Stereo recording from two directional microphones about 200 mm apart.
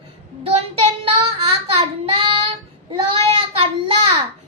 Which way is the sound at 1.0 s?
25° right (ahead or behind).